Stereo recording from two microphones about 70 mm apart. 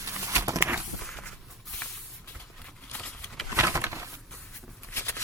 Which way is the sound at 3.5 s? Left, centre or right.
Right.